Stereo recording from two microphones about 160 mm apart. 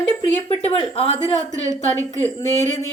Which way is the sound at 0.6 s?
40° left (ahead or behind).